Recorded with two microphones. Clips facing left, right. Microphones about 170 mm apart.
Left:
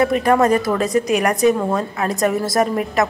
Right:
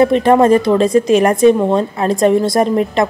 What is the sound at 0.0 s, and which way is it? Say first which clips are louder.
A woman's voice: right 5 dB; 25° right (ahead or behind).